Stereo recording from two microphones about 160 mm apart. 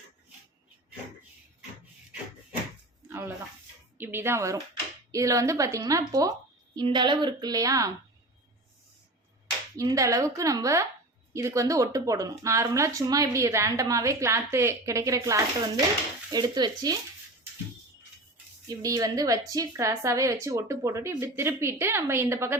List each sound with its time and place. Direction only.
3.1 s a sound: 15° right (ahead or behind)
3.9 s speech: 15° right (ahead or behind)
9.7 s speech: 20° right (ahead or behind)
18.8 s speech: 20° right (ahead or behind)